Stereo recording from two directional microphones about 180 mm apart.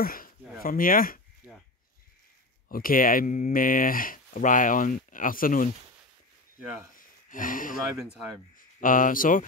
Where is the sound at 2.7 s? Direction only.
55° left (ahead or behind).